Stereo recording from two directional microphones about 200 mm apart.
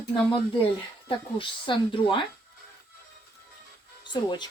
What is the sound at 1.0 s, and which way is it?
Speech, 25° left (ahead or behind).